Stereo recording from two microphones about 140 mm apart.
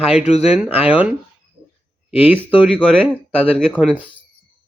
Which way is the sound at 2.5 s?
10° right (ahead or behind).